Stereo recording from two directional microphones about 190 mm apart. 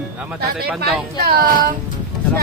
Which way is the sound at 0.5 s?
Centre (ahead or behind).